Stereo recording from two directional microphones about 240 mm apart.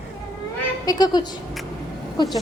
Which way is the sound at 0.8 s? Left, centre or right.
Centre.